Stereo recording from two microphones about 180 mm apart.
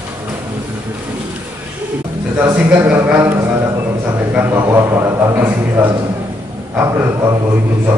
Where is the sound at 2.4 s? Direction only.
10° right (ahead or behind).